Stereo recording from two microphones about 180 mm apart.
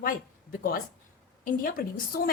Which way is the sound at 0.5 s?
55° left (ahead or behind).